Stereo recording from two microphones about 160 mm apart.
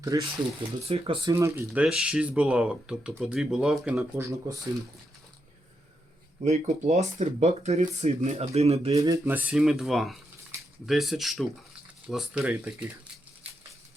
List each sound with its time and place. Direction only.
0.0 s speech: 20° right (ahead or behind)
0.9 s speech: 35° right (ahead or behind)
1.3 s speech: 15° right (ahead or behind)
4.2 s speech: 20° right (ahead or behind)
6.4 s speech: 45° right (ahead or behind)
9.0 s speech: 20° right (ahead or behind)
9.5 s speech: centre (ahead or behind)